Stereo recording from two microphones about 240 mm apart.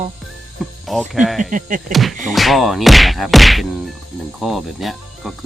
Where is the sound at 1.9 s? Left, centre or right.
Centre.